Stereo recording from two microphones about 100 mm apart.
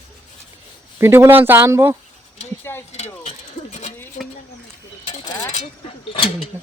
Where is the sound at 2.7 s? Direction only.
25° left (ahead or behind).